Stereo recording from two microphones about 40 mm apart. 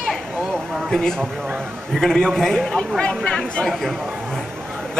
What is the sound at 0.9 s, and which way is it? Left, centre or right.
A man's voice, centre.